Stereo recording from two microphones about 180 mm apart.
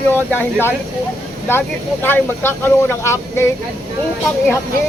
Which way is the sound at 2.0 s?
10° left (ahead or behind).